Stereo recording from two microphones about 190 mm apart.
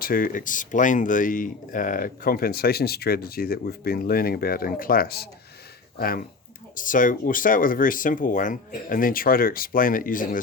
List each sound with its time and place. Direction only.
0.0 s speech: 50° left (ahead or behind)